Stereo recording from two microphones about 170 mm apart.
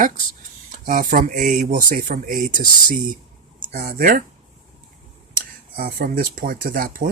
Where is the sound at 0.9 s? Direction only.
55° right (ahead or behind).